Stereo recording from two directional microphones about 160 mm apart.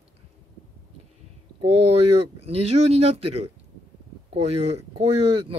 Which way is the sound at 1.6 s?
40° right (ahead or behind).